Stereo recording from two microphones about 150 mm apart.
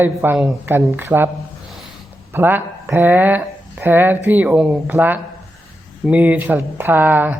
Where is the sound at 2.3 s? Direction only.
15° right (ahead or behind).